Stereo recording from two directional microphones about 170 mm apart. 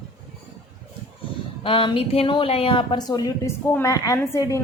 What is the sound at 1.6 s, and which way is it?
Speech, 30° left (ahead or behind).